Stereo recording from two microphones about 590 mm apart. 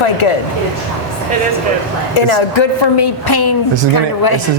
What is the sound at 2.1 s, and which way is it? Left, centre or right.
A woman's voice, left.